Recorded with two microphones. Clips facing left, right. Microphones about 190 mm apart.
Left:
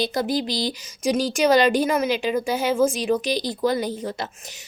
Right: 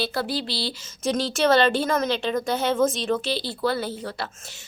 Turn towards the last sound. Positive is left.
turn(degrees=15)  # may be behind; listen again after turning